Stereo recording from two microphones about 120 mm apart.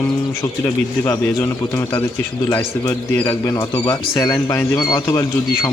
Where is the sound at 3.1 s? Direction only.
15° left (ahead or behind).